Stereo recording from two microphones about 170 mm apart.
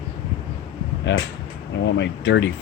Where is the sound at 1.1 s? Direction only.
90° left.